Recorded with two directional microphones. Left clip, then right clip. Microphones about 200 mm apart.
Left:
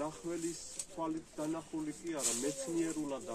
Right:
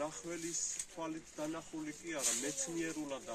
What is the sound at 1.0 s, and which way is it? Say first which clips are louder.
Speech: left 4 dB; 20° right (ahead or behind).